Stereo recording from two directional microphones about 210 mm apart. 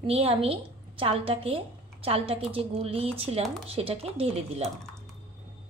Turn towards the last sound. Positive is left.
turn(degrees=-30)  # may be behind; listen again after turning